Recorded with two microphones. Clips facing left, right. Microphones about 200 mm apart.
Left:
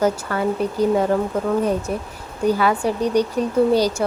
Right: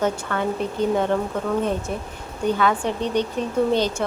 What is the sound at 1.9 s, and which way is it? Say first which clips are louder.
Speech: left 3 dB; 5° left (ahead or behind).